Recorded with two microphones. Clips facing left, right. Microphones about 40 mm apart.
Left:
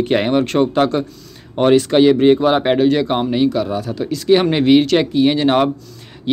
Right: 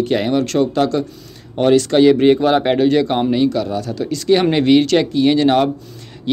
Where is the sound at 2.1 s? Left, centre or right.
Centre.